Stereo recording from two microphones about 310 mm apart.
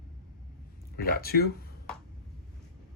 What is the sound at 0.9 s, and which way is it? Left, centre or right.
Speech, left.